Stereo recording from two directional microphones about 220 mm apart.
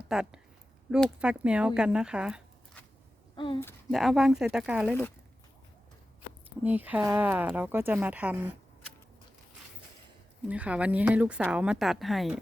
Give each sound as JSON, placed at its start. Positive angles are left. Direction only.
{"t": 0.0, "sound": "a woman's voice", "side_deg": -5}
{"t": 3.3, "sound": "speech", "side_deg": 25}
{"t": 3.9, "sound": "a woman's voice", "side_deg": 0}
{"t": 6.6, "sound": "speech", "side_deg": -5}
{"t": 10.5, "sound": "a woman's voice", "side_deg": -5}